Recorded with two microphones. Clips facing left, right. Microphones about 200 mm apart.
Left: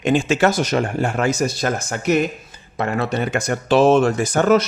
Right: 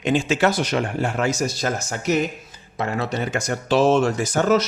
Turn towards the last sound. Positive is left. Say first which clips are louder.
# left 3 dB
turn(degrees=55)  # may be behind; listen again after turning